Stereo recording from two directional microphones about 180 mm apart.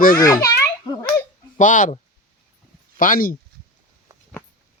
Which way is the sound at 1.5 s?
45° left (ahead or behind).